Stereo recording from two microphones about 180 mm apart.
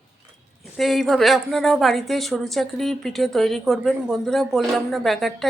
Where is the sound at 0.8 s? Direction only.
Centre (ahead or behind).